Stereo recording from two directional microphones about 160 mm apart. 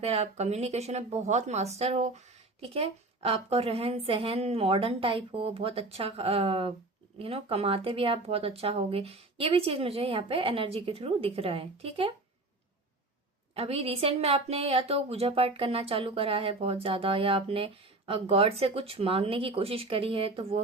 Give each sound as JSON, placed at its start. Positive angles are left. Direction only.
{"t": 0.0, "sound": "speech", "side_deg": -40}
{"t": 13.5, "sound": "speech", "side_deg": -40}